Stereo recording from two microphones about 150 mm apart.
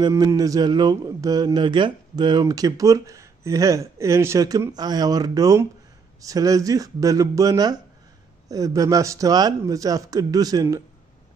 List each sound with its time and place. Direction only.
0.0 s speech: 20° right (ahead or behind)